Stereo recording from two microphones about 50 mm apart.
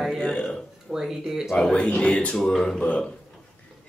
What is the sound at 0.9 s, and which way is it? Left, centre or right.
Speech, centre.